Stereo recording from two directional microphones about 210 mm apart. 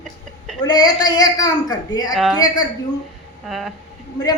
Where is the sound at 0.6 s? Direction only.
20° left (ahead or behind).